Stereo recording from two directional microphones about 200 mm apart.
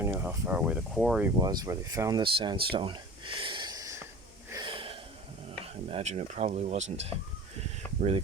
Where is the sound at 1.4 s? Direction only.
20° right (ahead or behind).